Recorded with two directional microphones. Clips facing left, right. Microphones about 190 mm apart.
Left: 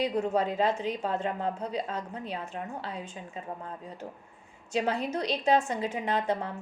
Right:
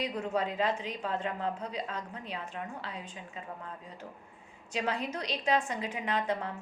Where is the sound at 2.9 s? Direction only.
45° left (ahead or behind).